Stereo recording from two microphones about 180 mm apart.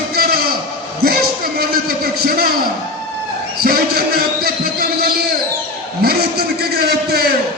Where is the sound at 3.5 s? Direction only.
55° right (ahead or behind).